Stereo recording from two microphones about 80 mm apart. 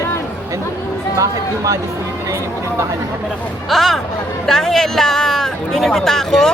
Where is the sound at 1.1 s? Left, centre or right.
Right.